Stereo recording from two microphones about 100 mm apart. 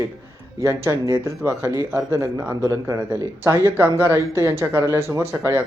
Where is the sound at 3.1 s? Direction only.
25° right (ahead or behind).